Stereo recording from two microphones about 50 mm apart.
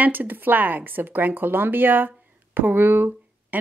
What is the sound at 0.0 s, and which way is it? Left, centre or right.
A woman's voice, right.